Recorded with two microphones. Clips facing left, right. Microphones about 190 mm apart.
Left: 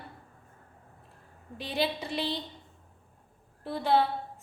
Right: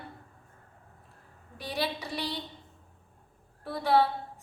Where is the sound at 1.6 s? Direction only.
25° left (ahead or behind).